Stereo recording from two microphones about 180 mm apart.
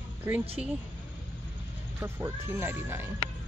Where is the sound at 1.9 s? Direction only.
15° right (ahead or behind).